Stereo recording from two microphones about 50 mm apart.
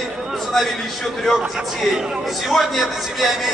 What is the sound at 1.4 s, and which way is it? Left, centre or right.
Speech, centre.